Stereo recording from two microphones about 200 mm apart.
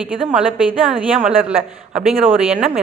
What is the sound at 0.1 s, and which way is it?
A woman's voice, 5° right (ahead or behind).